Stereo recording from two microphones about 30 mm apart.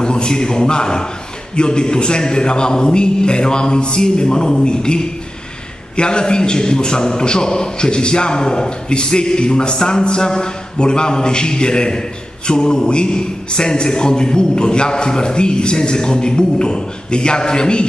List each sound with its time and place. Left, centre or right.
0.0 s a man's voice: left